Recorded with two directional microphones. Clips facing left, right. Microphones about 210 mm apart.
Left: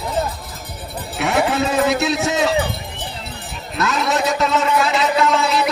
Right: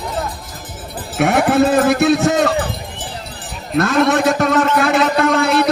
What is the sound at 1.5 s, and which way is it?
Speech, 55° right (ahead or behind).